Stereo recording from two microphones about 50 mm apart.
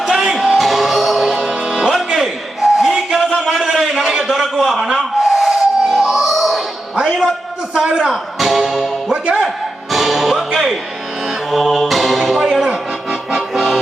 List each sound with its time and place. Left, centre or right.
0.1 s music: centre
3.3 s a sound: centre
4.5 s a sound: centre
6.9 s music: right
7.7 s a man's voice: centre
8.1 s music: centre
13.5 s accordion: centre